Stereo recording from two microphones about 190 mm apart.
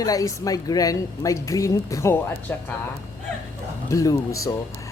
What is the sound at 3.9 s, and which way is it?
Speech, 15° left (ahead or behind).